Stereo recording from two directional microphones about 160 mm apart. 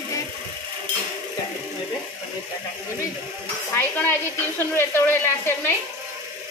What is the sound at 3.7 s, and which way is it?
A woman's voice, 15° left (ahead or behind).